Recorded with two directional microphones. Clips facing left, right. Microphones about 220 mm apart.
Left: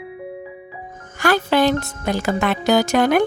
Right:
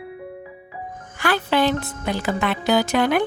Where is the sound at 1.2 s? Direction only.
45° left (ahead or behind).